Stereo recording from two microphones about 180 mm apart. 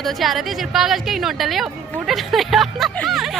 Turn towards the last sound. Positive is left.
turn(degrees=0)  # may be behind; listen again after turning